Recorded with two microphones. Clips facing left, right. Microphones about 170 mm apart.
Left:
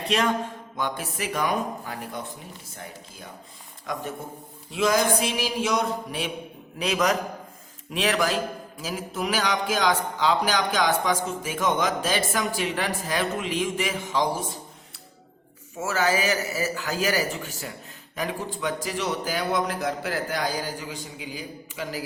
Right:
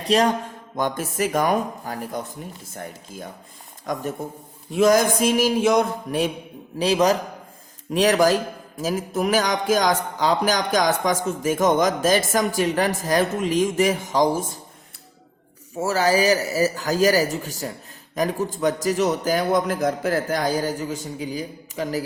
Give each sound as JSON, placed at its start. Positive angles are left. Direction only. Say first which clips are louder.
{"t": 0.0, "sound": "a sound", "louder": "right 5 dB", "side_deg": -35}
{"t": 0.8, "sound": "speech", "louder": "right 7 dB", "side_deg": -45}
{"t": 3.9, "sound": "speech", "louder": "right 5 dB", "side_deg": -45}
{"t": 6.7, "sound": "a man's voice", "louder": "right 5 dB", "side_deg": -30}
{"t": 15.8, "sound": "a man's voice", "louder": "right 5 dB", "side_deg": -35}